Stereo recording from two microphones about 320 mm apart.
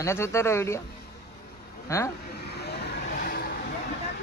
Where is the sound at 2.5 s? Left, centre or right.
Left.